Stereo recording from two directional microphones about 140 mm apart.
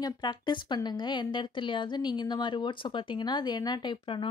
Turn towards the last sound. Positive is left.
turn(degrees=35)  # may be behind; listen again after turning